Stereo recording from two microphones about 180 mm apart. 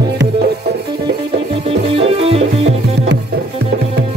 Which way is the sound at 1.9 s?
30° right (ahead or behind).